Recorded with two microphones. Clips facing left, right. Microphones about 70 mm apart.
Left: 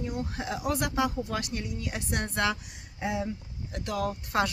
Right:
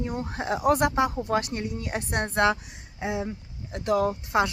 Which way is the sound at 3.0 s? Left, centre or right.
Centre.